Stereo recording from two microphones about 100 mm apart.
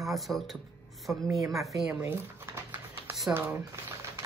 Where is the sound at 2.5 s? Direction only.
25° right (ahead or behind).